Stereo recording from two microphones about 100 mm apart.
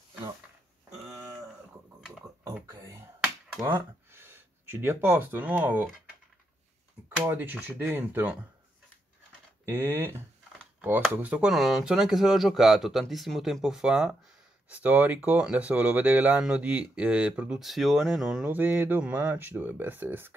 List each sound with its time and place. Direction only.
2.0 s a sound: 5° right (ahead or behind)
2.7 s a sound: 35° right (ahead or behind)
4.1 s speech: 25° right (ahead or behind)
7.2 s speech: 20° right (ahead or behind)
9.7 s speech: 25° right (ahead or behind)
11.4 s speech: centre (ahead or behind)
18.4 s speech: 20° right (ahead or behind)